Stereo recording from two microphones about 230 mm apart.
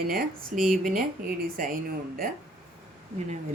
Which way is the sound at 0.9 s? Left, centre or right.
Right.